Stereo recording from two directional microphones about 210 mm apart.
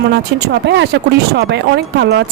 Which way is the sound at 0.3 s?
55° right (ahead or behind).